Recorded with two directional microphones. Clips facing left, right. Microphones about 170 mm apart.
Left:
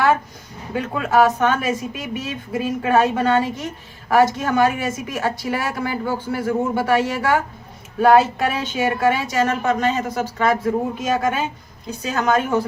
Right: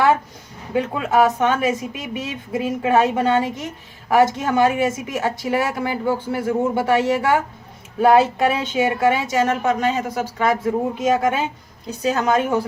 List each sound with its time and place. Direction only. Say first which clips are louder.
0.7 s a woman's voice: right 1 dB; 20° right (ahead or behind)